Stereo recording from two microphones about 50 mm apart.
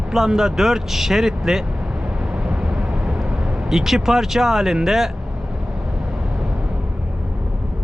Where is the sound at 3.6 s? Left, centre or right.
Centre.